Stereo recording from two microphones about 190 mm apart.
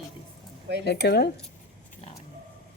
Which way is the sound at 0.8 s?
60° left (ahead or behind).